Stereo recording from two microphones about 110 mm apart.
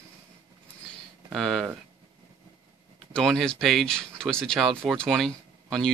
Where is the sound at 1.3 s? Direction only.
Centre (ahead or behind).